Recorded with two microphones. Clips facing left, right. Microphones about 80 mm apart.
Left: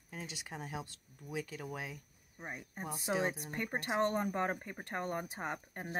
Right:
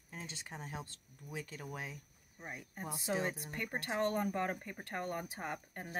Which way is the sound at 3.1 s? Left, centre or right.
Centre.